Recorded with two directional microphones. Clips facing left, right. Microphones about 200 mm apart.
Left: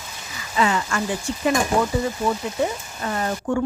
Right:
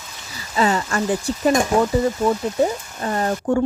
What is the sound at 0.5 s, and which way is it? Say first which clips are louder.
A woman's voice: right 2 dB; 35° right (ahead or behind).